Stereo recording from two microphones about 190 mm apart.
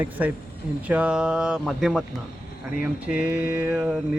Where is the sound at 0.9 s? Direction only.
5° right (ahead or behind).